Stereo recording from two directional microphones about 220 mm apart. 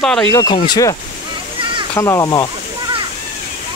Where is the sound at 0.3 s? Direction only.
15° left (ahead or behind).